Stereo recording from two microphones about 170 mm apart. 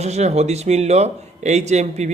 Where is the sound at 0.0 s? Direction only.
40° right (ahead or behind).